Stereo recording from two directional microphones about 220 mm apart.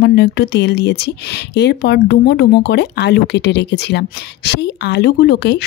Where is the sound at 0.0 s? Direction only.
50° left (ahead or behind).